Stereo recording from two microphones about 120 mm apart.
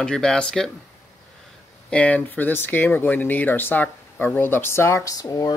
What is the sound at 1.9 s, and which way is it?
Speech, 10° left (ahead or behind).